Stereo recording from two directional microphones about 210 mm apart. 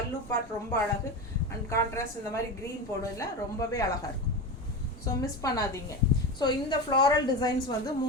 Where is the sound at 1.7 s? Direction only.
15° left (ahead or behind).